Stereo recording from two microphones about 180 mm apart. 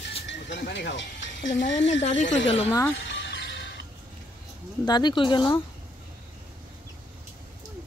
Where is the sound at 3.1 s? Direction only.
80° left.